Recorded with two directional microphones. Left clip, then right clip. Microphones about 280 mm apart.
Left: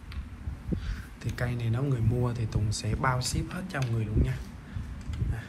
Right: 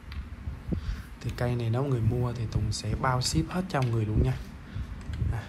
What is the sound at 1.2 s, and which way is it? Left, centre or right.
Speech, centre.